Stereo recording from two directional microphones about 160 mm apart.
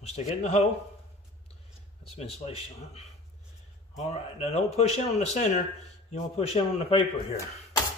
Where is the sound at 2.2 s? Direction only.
40° left (ahead or behind).